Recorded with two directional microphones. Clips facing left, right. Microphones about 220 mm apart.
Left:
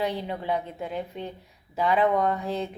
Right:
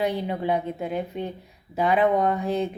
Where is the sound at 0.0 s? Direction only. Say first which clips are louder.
Right 4 dB; 15° right (ahead or behind).